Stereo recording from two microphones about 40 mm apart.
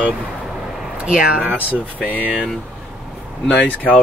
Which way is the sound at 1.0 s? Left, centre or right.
Right.